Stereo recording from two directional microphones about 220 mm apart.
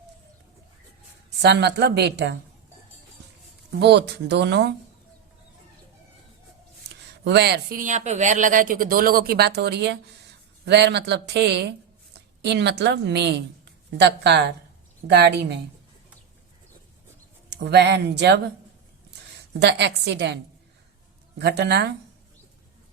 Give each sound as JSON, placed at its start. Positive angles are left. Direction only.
{"t": 1.4, "sound": "speech", "side_deg": -50}
{"t": 3.8, "sound": "speech", "side_deg": -50}
{"t": 7.3, "sound": "a woman's voice", "side_deg": -50}
{"t": 17.5, "sound": "speech", "side_deg": -50}
{"t": 19.6, "sound": "speech", "side_deg": -50}